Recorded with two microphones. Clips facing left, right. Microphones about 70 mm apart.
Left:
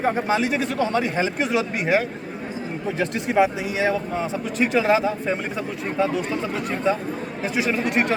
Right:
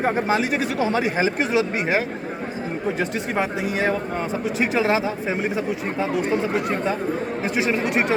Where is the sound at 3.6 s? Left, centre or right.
Right.